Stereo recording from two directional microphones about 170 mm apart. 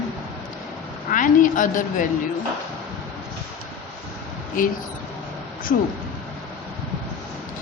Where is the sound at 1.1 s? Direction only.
50° left (ahead or behind).